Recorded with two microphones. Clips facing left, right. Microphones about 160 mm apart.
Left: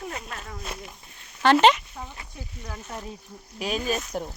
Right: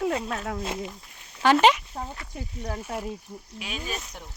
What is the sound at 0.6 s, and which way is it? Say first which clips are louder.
Speech: right 6 dB; 25° right (ahead or behind).